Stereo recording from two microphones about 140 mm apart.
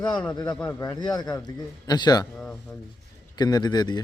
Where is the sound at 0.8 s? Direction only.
30° left (ahead or behind).